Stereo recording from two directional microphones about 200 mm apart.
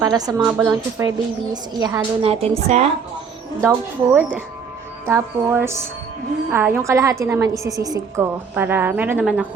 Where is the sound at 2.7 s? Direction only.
35° right (ahead or behind).